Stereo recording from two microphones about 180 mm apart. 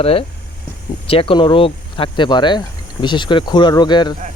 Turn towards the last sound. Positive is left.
turn(degrees=25)  # may be behind; listen again after turning